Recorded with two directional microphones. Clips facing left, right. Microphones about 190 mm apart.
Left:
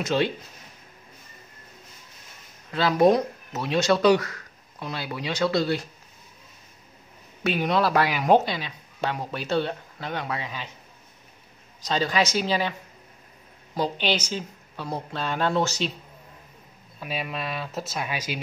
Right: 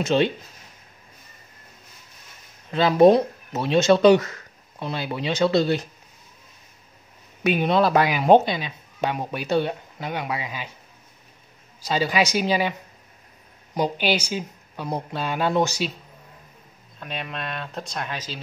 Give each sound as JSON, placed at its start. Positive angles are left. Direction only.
{"t": 0.0, "sound": "speech", "side_deg": -25}
{"t": 2.7, "sound": "speech", "side_deg": -25}
{"t": 7.4, "sound": "speech", "side_deg": -20}
{"t": 11.8, "sound": "speech", "side_deg": -10}
{"t": 13.7, "sound": "speech", "side_deg": -15}
{"t": 17.0, "sound": "speech", "side_deg": 5}